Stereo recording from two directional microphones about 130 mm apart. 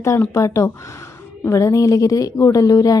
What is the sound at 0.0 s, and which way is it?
A woman's voice, 20° left (ahead or behind).